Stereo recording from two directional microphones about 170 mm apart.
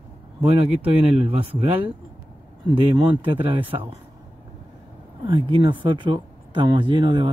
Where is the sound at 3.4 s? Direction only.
30° right (ahead or behind).